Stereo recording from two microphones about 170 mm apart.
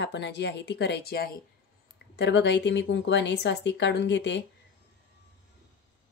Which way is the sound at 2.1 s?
90° left.